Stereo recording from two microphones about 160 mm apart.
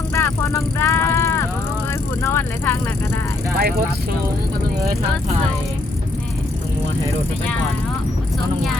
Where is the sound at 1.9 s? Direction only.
15° left (ahead or behind).